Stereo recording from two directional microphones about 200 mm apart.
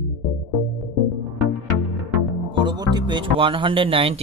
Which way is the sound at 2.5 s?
20° right (ahead or behind).